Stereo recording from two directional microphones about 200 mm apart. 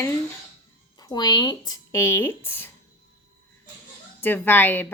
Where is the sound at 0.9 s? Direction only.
20° left (ahead or behind).